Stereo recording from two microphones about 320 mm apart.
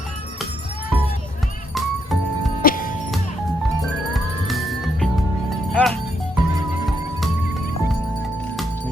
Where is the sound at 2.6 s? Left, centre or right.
Left.